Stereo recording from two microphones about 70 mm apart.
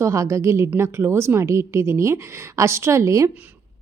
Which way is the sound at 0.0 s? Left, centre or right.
Right.